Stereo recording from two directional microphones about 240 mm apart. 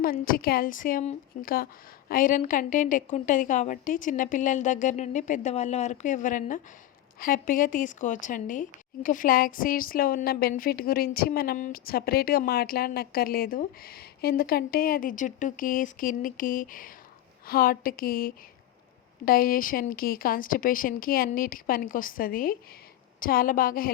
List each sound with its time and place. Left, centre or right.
0.0 s a woman's voice: left